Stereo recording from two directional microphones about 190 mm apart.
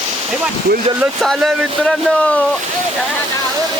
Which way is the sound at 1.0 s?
Centre (ahead or behind).